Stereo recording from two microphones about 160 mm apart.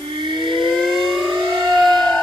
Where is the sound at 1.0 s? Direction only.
30° right (ahead or behind).